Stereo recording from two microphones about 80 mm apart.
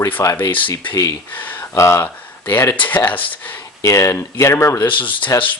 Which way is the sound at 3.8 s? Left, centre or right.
Left.